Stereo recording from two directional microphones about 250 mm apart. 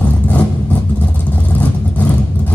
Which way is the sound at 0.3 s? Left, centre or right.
Centre.